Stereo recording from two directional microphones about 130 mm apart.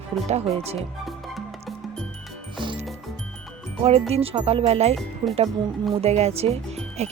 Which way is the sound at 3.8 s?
50° right (ahead or behind).